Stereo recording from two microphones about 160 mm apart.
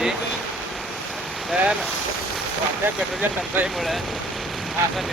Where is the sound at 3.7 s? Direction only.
Centre (ahead or behind).